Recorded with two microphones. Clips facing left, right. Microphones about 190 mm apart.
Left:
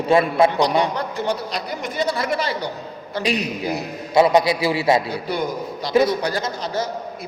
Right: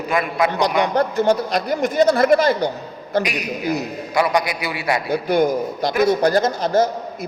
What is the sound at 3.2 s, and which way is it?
A man's voice, 30° left (ahead or behind).